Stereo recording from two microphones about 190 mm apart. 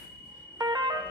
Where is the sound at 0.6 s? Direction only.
20° right (ahead or behind).